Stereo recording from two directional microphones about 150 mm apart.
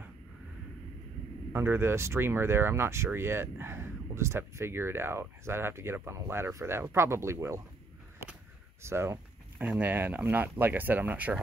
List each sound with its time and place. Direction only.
1.5 s speech: 15° right (ahead or behind)
8.8 s speech: 15° right (ahead or behind)